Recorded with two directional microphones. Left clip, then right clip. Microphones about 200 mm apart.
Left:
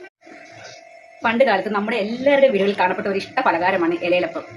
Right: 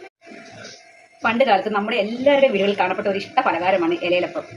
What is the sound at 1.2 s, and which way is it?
A woman's voice, 15° left (ahead or behind).